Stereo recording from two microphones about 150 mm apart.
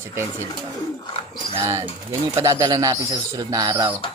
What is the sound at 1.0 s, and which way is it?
Bird, 35° left (ahead or behind).